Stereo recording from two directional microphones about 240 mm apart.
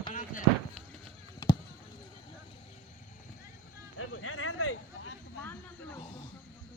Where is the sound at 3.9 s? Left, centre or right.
Left.